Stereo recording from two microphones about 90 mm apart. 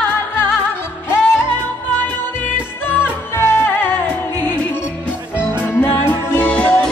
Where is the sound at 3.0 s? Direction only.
30° left (ahead or behind).